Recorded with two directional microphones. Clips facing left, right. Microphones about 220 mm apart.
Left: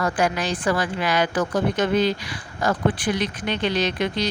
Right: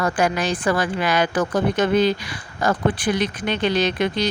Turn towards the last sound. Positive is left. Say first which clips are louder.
# right 3 dB
turn(degrees=-50)  # may be behind; listen again after turning